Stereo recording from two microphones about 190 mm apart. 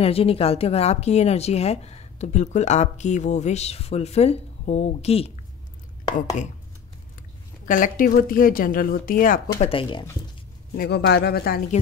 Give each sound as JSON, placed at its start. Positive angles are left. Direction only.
{"t": 0.0, "sound": "speech", "side_deg": 30}
{"t": 7.6, "sound": "a woman's voice", "side_deg": 45}
{"t": 9.7, "sound": "speech", "side_deg": 25}
{"t": 10.8, "sound": "speech", "side_deg": 60}